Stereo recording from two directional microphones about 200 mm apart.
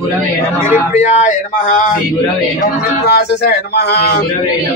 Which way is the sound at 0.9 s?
35° left (ahead or behind).